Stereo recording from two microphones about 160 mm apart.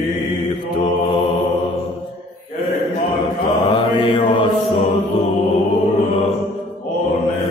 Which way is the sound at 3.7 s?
35° left (ahead or behind).